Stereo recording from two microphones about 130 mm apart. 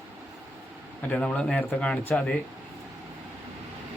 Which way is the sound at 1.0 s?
10° left (ahead or behind).